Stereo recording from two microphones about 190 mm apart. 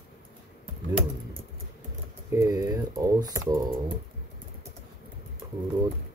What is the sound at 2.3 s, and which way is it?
Speech, 15° right (ahead or behind).